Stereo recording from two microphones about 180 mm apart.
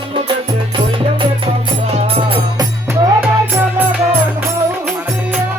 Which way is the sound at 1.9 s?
30° right (ahead or behind).